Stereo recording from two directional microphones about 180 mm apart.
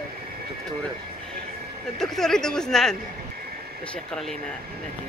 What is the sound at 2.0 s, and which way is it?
Speech, centre (ahead or behind).